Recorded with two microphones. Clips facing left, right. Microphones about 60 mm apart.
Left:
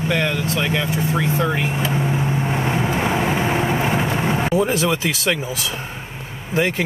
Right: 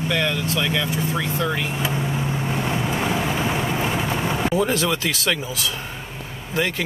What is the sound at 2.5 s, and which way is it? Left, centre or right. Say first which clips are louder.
Vehicle: left 1 dB; left.